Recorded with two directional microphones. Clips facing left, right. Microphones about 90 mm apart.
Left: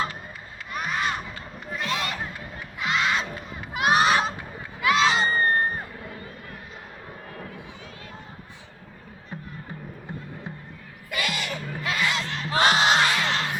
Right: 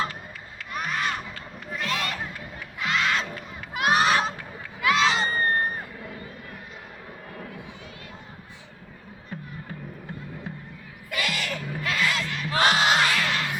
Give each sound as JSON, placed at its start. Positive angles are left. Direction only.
{"t": 0.7, "sound": "music", "side_deg": 5}
{"t": 1.8, "sound": "crowd", "side_deg": 20}
{"t": 9.3, "sound": "music", "side_deg": 25}
{"t": 11.1, "sound": "music", "side_deg": 10}